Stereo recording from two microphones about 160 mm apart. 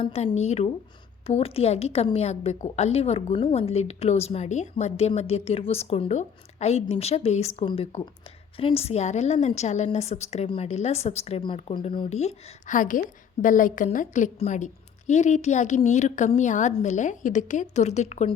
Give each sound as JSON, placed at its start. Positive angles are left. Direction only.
{"t": 0.0, "sound": "a woman's voice", "side_deg": 45}
{"t": 12.0, "sound": "a woman's voice", "side_deg": 45}